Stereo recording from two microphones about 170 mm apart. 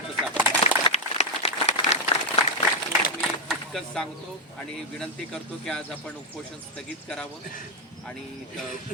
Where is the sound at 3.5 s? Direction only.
5° left (ahead or behind).